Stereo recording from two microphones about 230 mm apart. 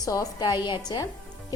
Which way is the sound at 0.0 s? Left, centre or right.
Centre.